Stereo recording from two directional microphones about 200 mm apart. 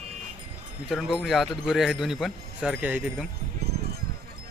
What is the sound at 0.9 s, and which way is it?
A man's voice, centre (ahead or behind).